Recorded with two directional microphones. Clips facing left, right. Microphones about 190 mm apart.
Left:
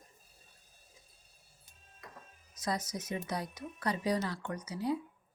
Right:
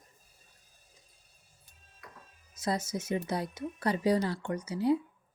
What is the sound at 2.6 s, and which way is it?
Speech, 25° right (ahead or behind).